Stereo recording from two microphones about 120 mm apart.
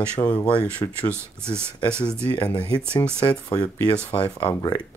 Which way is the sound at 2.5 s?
40° left (ahead or behind).